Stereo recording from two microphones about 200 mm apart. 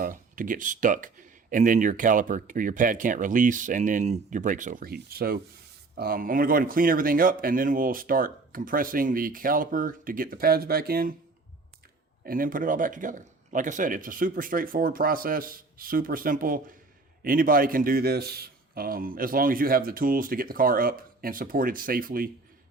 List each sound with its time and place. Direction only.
0.0 s speech: 45° right (ahead or behind)
12.2 s speech: 45° right (ahead or behind)